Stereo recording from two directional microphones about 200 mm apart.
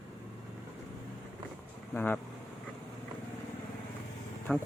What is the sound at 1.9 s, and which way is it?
Speech, 10° left (ahead or behind).